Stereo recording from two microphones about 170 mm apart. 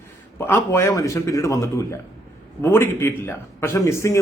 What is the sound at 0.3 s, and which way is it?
A man's voice, 15° left (ahead or behind).